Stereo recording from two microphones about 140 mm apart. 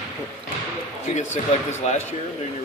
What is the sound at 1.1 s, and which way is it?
Speech, 55° left (ahead or behind).